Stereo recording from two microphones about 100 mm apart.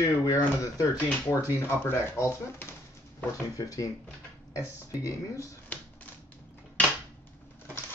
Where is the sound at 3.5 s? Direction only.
35° left (ahead or behind).